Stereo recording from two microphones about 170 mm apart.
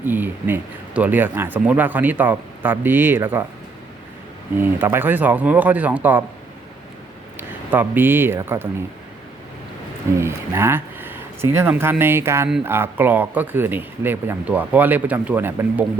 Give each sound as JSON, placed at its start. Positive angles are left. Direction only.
{"t": 0.0, "sound": "speech", "side_deg": -10}
{"t": 4.5, "sound": "speech", "side_deg": -10}
{"t": 7.3, "sound": "speech", "side_deg": -10}
{"t": 10.2, "sound": "speech", "side_deg": -15}